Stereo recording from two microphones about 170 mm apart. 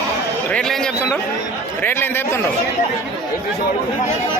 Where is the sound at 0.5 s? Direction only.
5° left (ahead or behind).